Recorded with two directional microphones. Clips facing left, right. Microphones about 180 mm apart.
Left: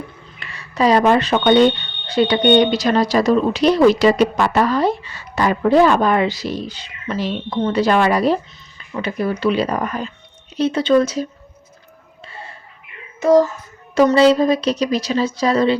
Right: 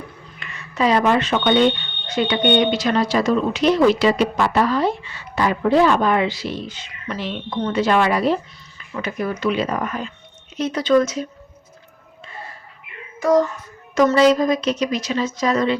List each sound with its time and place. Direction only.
0.3 s speech: 35° left (ahead or behind)
12.3 s a sound: 25° left (ahead or behind)
14.2 s speech: 30° left (ahead or behind)